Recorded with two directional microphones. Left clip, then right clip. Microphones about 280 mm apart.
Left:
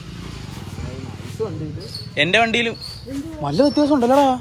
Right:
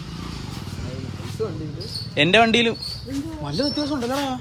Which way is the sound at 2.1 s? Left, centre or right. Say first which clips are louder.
Even; centre.